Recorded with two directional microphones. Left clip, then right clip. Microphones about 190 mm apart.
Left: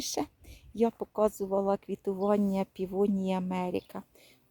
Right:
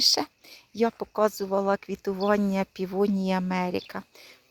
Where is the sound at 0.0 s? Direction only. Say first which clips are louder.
Right 11 dB; 5° right (ahead or behind).